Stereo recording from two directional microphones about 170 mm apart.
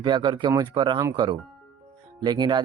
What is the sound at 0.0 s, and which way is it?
Speech, 30° right (ahead or behind).